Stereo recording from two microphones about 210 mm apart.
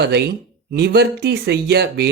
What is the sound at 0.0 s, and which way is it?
Speech, 50° right (ahead or behind).